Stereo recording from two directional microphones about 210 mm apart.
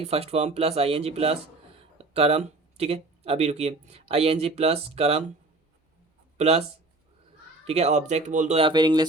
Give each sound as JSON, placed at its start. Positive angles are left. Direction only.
{"t": 0.0, "sound": "speech", "side_deg": -30}
{"t": 6.3, "sound": "speech", "side_deg": -30}
{"t": 7.7, "sound": "speech", "side_deg": -30}